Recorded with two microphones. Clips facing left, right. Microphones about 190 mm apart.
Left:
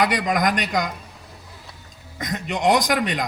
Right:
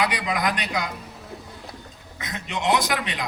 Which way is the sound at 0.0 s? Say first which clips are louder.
Left 4 dB; 45° left (ahead or behind).